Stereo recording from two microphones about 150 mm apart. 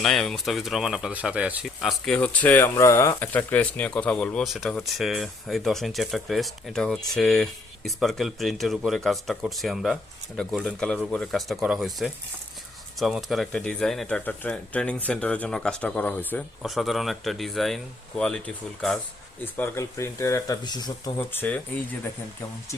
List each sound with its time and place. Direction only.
0.0 s speech: 5° left (ahead or behind)
16.6 s speech: centre (ahead or behind)
19.5 s speech: 15° left (ahead or behind)
21.2 s speech: 10° left (ahead or behind)